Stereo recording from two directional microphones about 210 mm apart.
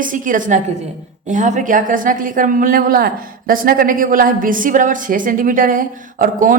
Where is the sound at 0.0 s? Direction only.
40° right (ahead or behind).